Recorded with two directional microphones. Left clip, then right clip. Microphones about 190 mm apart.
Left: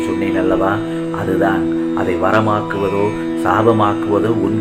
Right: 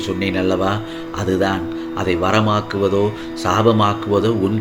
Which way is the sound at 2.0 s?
55° right (ahead or behind).